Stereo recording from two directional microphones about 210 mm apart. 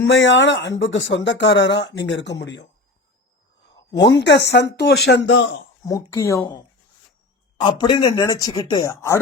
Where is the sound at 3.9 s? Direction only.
55° left (ahead or behind).